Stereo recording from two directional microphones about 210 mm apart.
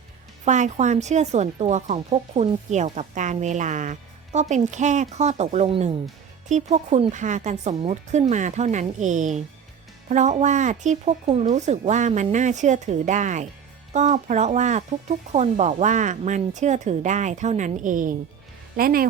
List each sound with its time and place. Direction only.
0.4 s a woman's voice: 35° right (ahead or behind)